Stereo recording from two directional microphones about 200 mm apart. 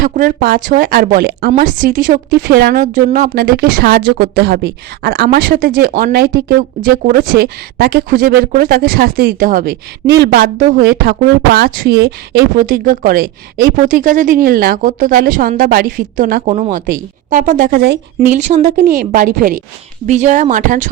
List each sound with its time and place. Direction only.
0.0 s speech: 45° right (ahead or behind)
18.3 s a woman's voice: 35° right (ahead or behind)